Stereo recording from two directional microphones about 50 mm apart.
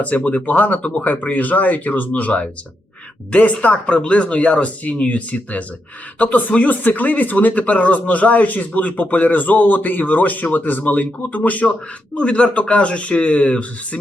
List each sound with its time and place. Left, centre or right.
0.3 s speech: left